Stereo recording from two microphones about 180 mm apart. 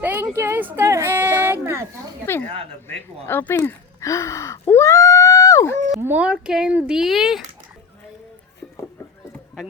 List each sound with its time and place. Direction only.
0.0 s a sound: 10° right (ahead or behind)
2.8 s speech: 10° left (ahead or behind)
6.0 s speech: 10° right (ahead or behind)